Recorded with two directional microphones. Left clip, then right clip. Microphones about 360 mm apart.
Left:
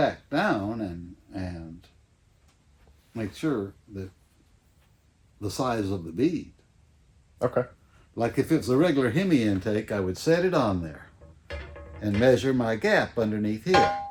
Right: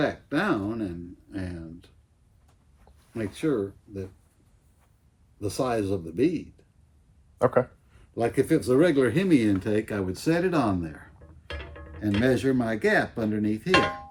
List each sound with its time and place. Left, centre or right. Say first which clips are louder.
0.0 s speech: left 2 dB; centre
1.3 s a sound: even; centre
3.2 s speech: right 2 dB; centre
5.4 s speech: right 1 dB; centre
7.3 s speech: right 4 dB; centre
8.1 s speech: right 1 dB; centre